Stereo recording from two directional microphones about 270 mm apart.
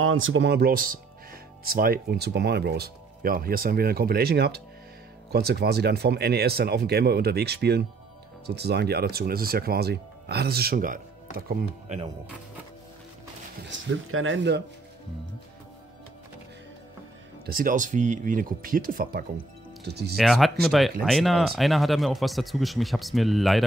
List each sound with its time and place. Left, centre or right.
0.0 s speech: right
13.7 s speech: right
17.5 s speech: right
20.2 s speech: centre